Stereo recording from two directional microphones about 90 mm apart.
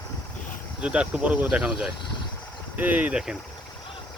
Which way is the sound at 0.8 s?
10° right (ahead or behind).